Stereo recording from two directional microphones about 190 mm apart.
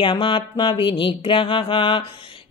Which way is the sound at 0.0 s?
25° left (ahead or behind).